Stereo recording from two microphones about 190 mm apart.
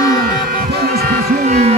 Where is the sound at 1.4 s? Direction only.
35° right (ahead or behind).